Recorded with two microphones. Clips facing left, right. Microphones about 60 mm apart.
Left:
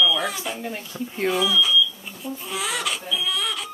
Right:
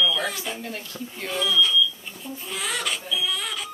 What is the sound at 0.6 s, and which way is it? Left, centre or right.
Speech, centre.